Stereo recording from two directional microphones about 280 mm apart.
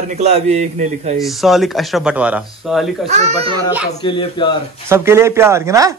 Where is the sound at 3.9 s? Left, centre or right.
Centre.